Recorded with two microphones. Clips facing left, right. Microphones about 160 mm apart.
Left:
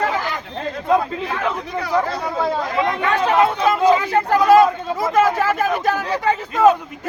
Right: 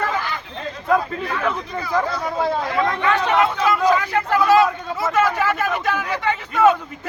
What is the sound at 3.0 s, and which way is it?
Speech, 30° left (ahead or behind).